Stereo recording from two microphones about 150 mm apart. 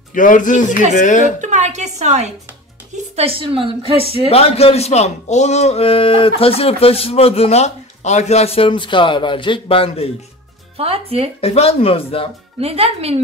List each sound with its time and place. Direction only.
0.1 s speech: 60° left (ahead or behind)
1.4 s a woman's voice: 50° right (ahead or behind)
3.2 s a woman's voice: 40° right (ahead or behind)
4.3 s speech: 45° left (ahead or behind)
10.8 s speech: 40° right (ahead or behind)
11.4 s speech: 40° left (ahead or behind)
12.5 s a woman's voice: 40° right (ahead or behind)